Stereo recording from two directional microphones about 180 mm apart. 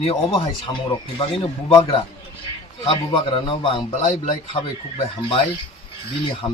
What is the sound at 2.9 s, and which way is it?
A man's voice, 30° left (ahead or behind).